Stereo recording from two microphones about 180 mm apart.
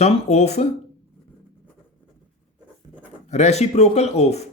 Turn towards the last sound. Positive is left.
turn(degrees=35)  # may be behind; listen again after turning